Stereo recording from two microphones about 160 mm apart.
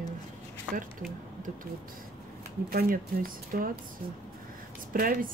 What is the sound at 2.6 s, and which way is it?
Speech, 70° right (ahead or behind).